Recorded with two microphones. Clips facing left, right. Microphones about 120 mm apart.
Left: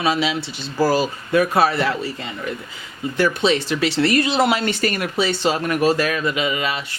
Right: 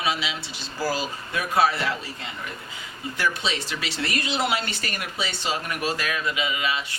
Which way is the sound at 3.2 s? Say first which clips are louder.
Left 9 dB; 60° left (ahead or behind).